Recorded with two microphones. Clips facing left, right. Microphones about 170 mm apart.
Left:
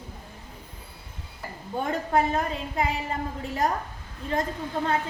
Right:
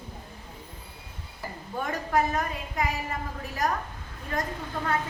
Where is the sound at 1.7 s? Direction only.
25° left (ahead or behind).